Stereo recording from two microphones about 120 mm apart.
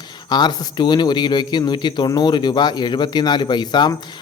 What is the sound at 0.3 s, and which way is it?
Speech, 35° left (ahead or behind).